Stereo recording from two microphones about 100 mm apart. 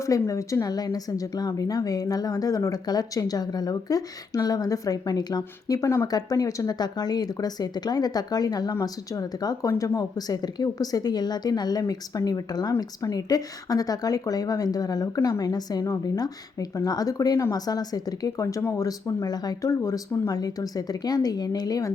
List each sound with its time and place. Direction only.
0.0 s speech: 35° left (ahead or behind)